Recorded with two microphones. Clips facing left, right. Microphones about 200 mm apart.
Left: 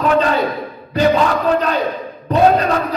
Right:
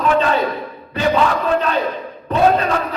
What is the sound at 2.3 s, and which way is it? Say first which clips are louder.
Speech: left 2 dB; 40° left (ahead or behind).